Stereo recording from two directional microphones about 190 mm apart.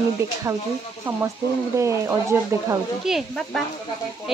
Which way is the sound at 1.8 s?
15° right (ahead or behind).